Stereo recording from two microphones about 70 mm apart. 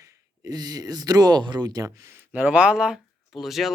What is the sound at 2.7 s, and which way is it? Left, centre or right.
Speech, centre.